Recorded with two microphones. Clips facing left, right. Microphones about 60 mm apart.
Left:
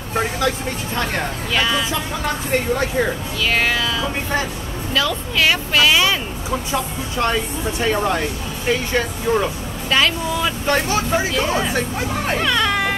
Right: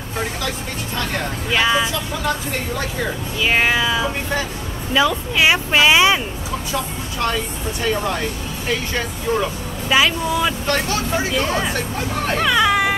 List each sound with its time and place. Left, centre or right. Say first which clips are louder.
1.5 s speech: right 3 dB; centre
3.3 s speech: right 3 dB; centre
6.7 s speech: left 2 dB; left
9.8 s speech: right 1 dB; centre
10.7 s speech: left 2 dB; centre